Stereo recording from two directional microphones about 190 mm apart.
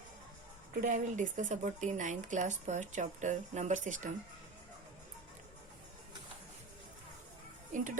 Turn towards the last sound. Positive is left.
turn(degrees=-40)  # may be behind; listen again after turning